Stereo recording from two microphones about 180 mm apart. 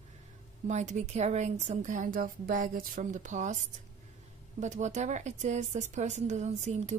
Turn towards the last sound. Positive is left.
turn(degrees=-40)  # may be behind; listen again after turning